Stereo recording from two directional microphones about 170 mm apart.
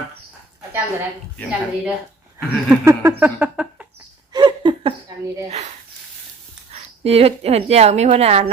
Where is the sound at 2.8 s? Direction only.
15° right (ahead or behind).